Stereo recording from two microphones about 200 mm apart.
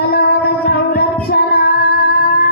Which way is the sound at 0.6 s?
50° left (ahead or behind).